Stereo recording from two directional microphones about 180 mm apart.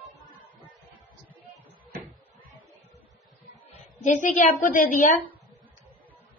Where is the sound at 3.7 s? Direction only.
40° left (ahead or behind).